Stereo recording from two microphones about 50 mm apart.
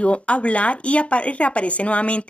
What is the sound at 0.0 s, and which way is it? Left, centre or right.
Speech, left.